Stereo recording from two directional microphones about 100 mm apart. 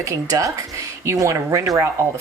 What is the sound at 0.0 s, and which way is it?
Speech, 35° right (ahead or behind).